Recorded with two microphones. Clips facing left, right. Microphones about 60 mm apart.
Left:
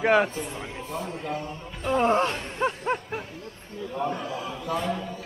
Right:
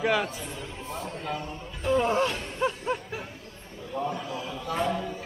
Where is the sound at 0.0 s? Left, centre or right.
Left.